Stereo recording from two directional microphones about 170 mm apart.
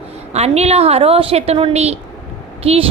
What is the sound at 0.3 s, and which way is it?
Speech, 40° right (ahead or behind).